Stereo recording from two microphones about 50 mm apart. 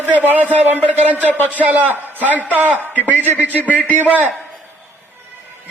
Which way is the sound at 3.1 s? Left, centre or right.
Left.